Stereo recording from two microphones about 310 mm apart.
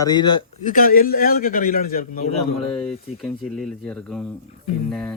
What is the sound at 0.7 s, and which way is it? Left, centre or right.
A man's voice, left.